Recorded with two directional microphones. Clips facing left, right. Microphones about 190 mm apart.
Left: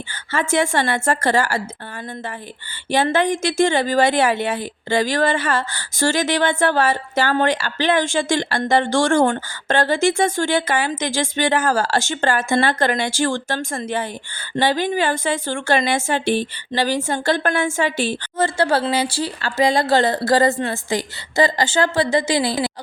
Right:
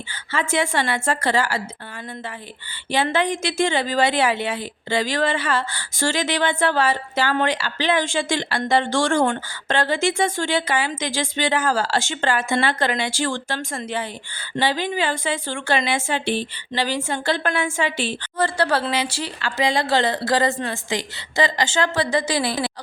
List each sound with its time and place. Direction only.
0.1 s a woman's voice: 45° left (ahead or behind)
2.9 s a woman's voice: 45° left (ahead or behind)
18.3 s speech: 25° left (ahead or behind)